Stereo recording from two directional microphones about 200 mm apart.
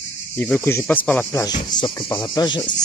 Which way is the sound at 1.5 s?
20° left (ahead or behind).